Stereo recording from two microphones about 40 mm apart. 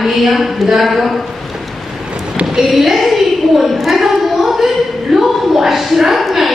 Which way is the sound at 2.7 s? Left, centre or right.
Centre.